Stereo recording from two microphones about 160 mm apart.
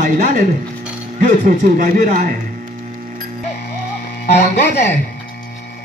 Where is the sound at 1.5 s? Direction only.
55° right (ahead or behind).